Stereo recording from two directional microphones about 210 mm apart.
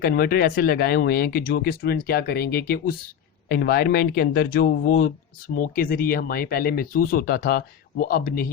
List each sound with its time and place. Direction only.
0.0 s speech: 45° left (ahead or behind)